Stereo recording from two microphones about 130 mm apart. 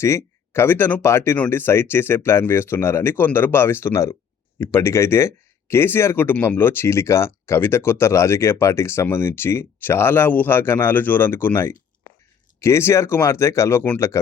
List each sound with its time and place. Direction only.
0.0 s speech: 20° left (ahead or behind)